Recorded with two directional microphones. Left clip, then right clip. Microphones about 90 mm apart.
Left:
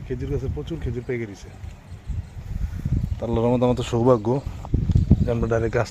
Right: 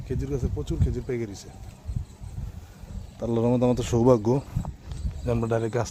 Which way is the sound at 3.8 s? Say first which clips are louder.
Left 2 dB; 40° right (ahead or behind).